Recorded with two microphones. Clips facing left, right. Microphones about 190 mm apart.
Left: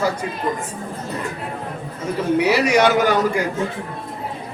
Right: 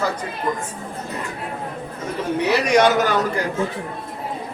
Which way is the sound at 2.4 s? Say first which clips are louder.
Right 1 dB; 10° left (ahead or behind).